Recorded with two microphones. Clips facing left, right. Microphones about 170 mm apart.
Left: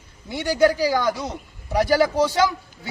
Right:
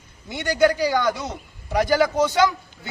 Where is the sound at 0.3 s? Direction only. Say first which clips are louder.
Left 1 dB; 10° left (ahead or behind).